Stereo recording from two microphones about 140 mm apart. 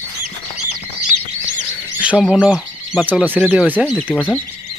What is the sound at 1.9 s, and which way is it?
Bird, 10° right (ahead or behind).